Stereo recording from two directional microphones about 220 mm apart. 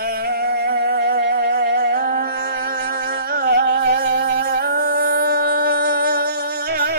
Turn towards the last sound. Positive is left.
turn(degrees=-45)  # may be behind; listen again after turning